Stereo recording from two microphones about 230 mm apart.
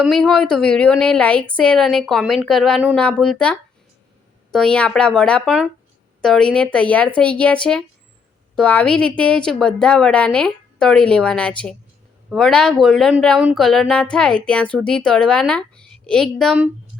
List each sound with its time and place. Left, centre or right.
0.0 s speech: centre